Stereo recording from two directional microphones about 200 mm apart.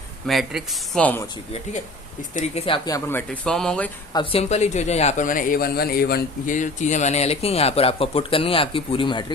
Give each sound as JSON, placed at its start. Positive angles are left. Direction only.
{"t": 0.3, "sound": "speech", "side_deg": 0}
{"t": 2.3, "sound": "speech", "side_deg": 30}
{"t": 4.1, "sound": "speech", "side_deg": 25}